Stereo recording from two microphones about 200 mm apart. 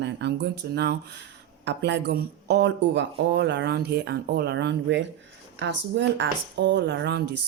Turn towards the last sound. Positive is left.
turn(degrees=-60)  # may be behind; listen again after turning